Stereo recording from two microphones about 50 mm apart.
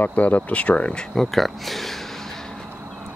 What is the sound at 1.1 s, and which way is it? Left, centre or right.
Speech, centre.